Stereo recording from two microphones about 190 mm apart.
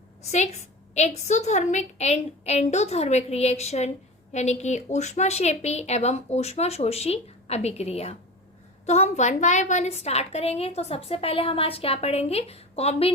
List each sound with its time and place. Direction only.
0.2 s a woman's voice: 35° left (ahead or behind)